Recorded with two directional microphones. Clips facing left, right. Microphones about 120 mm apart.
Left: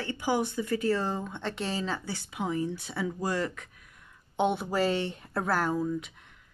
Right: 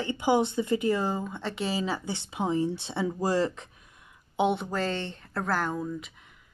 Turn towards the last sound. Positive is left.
turn(degrees=0)  # may be behind; listen again after turning